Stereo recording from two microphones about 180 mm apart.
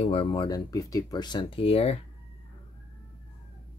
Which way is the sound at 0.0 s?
30° left (ahead or behind).